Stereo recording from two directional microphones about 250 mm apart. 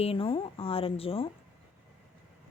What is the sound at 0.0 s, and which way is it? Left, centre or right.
A woman's voice, left.